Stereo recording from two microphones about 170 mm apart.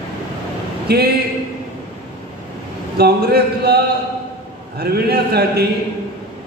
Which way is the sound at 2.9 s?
70° right (ahead or behind).